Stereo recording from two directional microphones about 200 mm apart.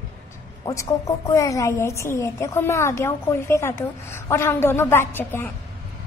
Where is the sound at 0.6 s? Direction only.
15° left (ahead or behind).